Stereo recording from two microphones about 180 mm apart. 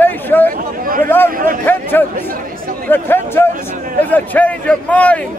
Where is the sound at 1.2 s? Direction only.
50° right (ahead or behind).